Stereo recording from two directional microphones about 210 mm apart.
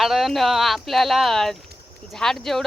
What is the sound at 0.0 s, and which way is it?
Speech, centre (ahead or behind).